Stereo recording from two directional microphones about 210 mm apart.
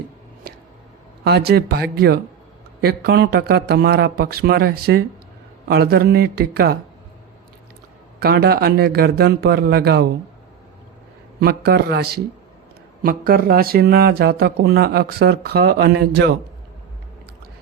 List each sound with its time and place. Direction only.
1.2 s speech: 50° right (ahead or behind)
8.2 s speech: 50° right (ahead or behind)
11.3 s speech: 50° right (ahead or behind)